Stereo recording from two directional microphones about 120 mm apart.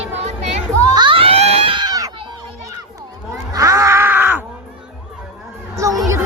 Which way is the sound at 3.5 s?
25° right (ahead or behind).